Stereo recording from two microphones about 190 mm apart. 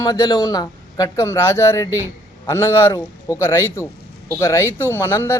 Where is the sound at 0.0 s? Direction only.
20° left (ahead or behind).